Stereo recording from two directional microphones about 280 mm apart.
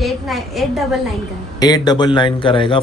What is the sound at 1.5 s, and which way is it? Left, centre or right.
A man's voice, centre.